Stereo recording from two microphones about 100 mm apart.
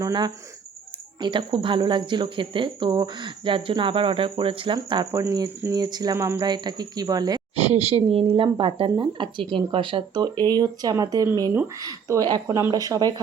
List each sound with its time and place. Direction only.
0.0 s speech: 45° right (ahead or behind)
5.1 s speech: 40° right (ahead or behind)
6.1 s speech: 30° right (ahead or behind)
6.4 s speech: 45° right (ahead or behind)
7.5 s speech: 85° right; by 13.1 s 40° right (ahead or behind)